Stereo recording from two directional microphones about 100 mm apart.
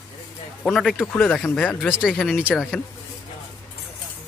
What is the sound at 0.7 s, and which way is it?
Speech, centre (ahead or behind).